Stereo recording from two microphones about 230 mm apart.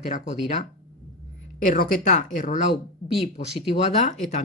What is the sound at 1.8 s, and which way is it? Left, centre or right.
Speech, left.